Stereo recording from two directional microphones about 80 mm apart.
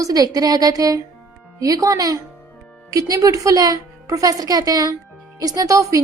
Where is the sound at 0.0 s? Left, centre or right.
Right.